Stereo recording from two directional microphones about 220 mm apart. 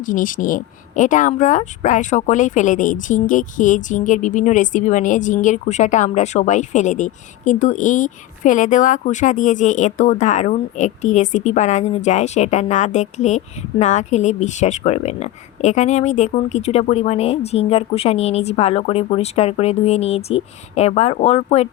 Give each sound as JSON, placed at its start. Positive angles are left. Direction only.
{"t": 0.0, "sound": "speech", "side_deg": 35}